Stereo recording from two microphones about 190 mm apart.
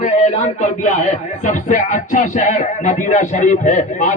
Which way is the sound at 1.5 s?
40° left (ahead or behind).